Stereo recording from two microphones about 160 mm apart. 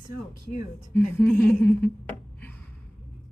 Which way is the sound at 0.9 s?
10° left (ahead or behind).